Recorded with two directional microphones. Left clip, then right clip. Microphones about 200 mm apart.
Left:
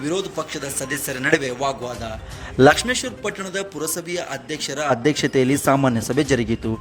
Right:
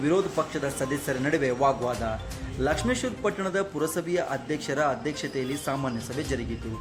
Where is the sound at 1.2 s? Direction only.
55° left (ahead or behind).